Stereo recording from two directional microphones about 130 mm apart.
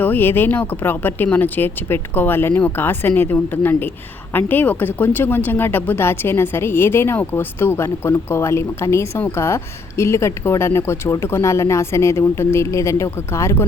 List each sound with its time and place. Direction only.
0.0 s speech: 15° left (ahead or behind)